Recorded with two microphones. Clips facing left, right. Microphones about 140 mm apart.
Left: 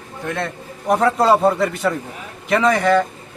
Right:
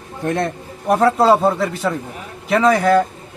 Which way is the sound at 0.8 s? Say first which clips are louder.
Right 2 dB; centre (ahead or behind).